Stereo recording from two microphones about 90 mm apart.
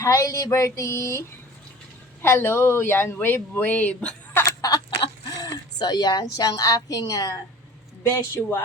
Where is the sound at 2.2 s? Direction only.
25° left (ahead or behind).